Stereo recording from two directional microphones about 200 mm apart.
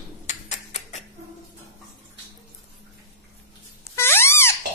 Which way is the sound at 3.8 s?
10° left (ahead or behind).